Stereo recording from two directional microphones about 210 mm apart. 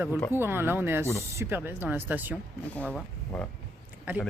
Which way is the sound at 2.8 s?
5° left (ahead or behind).